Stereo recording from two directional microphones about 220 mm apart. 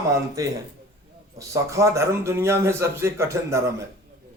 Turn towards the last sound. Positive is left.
turn(degrees=-15)  # may be behind; listen again after turning